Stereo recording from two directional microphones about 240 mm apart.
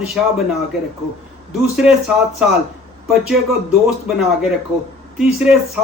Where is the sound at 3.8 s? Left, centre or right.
Centre.